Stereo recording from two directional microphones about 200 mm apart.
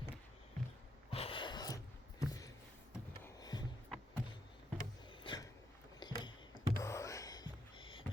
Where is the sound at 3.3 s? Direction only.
20° left (ahead or behind).